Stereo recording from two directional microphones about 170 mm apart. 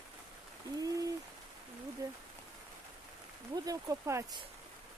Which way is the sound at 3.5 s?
20° right (ahead or behind).